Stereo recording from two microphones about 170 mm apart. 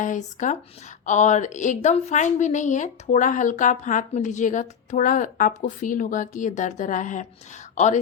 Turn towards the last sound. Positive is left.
turn(degrees=45)  # may be behind; listen again after turning